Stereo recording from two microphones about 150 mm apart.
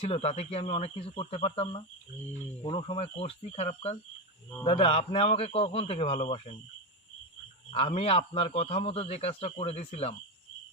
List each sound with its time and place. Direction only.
0.0 s a man's voice: 45° left (ahead or behind)
7.7 s a man's voice: 40° left (ahead or behind)